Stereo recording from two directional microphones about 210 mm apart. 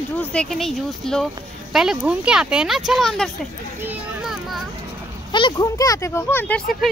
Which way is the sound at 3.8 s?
5° right (ahead or behind).